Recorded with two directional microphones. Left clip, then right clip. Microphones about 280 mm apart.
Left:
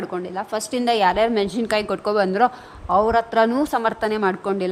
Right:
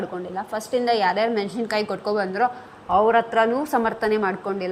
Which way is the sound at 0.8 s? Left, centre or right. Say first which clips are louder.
Left 4 dB; left.